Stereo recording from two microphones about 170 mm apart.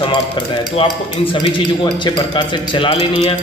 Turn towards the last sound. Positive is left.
turn(degrees=35)  # may be behind; listen again after turning